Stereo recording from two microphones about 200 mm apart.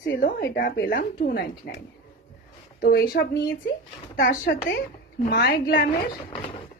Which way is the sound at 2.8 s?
50° left (ahead or behind).